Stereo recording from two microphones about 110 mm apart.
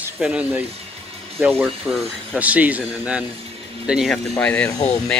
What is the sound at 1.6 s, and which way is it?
Speech, 10° right (ahead or behind).